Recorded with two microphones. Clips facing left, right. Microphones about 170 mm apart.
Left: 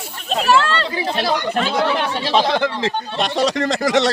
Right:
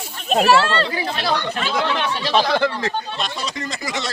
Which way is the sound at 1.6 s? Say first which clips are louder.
Left 3 dB; 50° left (ahead or behind).